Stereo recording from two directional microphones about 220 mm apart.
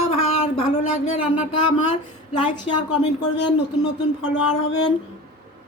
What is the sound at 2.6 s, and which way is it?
Speech, 90° left.